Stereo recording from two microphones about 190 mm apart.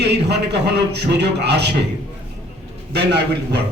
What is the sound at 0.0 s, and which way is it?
A man's voice, 65° right (ahead or behind).